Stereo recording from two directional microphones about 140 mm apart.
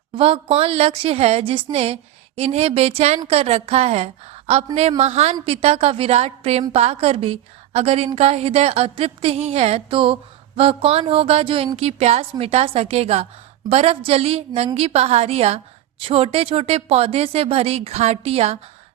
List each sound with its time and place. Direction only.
0.1 s a woman's voice: 40° right (ahead or behind)